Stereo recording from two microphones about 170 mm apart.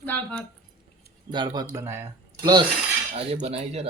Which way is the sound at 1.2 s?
25° right (ahead or behind).